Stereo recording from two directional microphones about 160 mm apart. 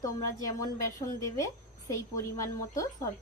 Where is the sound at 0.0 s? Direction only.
20° left (ahead or behind).